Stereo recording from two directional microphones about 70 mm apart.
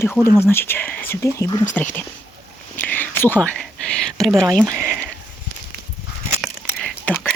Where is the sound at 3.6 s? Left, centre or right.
Centre.